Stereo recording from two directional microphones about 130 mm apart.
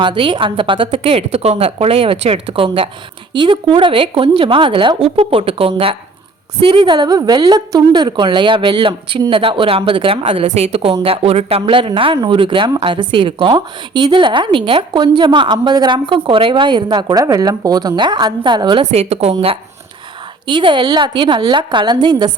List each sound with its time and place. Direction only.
0.0 s a woman's voice: 40° right (ahead or behind)
10.4 s a woman's voice: 55° right (ahead or behind); by 18.9 s 35° right (ahead or behind)
18.9 s a woman's voice: 55° right (ahead or behind)
20.5 s a woman's voice: 40° right (ahead or behind)